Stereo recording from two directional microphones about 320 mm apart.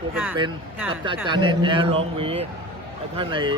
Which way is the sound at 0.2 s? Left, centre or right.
Centre.